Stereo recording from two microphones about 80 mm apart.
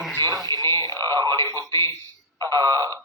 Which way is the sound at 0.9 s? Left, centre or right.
Right.